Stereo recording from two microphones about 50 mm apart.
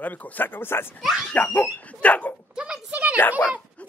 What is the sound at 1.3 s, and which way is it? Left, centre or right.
Speech, left.